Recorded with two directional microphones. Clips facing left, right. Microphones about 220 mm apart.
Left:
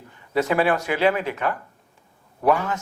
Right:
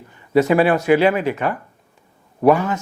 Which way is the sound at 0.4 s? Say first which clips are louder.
Right 4 dB; 15° right (ahead or behind).